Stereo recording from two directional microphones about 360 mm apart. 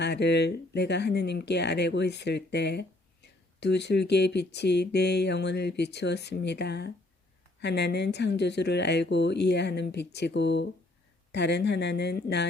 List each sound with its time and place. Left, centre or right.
0.0 s speech: left